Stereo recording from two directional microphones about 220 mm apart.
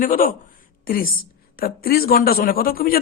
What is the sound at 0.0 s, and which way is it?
Speech, 40° left (ahead or behind).